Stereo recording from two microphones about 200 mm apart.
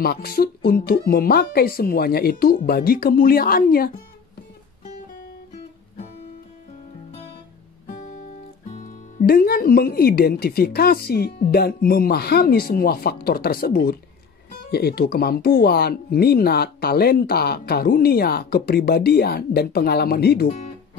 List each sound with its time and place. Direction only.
0.0 s speech: 50° left (ahead or behind)
8.7 s speech: 45° left (ahead or behind)
20.4 s speech: 35° left (ahead or behind)